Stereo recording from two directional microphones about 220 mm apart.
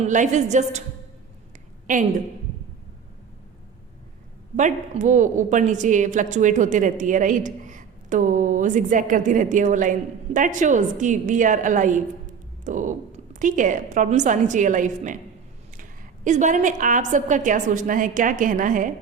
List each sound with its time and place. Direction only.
0.0 s a woman's voice: 35° right (ahead or behind)
1.9 s a woman's voice: 35° right (ahead or behind)
4.5 s a woman's voice: 35° right (ahead or behind)